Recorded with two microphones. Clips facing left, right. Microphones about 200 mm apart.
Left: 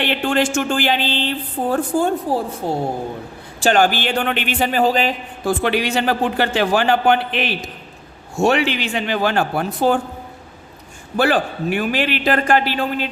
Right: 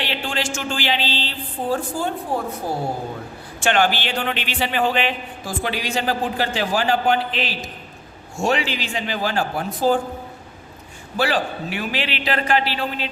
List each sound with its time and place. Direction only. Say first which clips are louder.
0.0 s speech: left 7 dB; 55° left (ahead or behind)
3.6 s speech: left 4 dB; 40° left (ahead or behind)
5.5 s a man's voice: left 8 dB; 65° left (ahead or behind)
11.2 s speech: left 4 dB; 50° left (ahead or behind)